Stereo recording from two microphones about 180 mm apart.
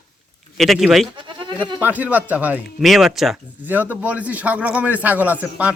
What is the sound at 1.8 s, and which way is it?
A man's voice, 10° right (ahead or behind).